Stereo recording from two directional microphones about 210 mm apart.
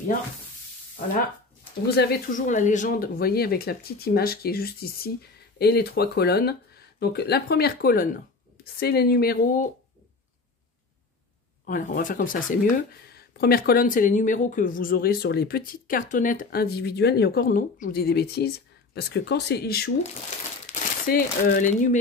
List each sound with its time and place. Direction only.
1.9 s speech: 50° left (ahead or behind)
11.6 s speech: 40° left (ahead or behind)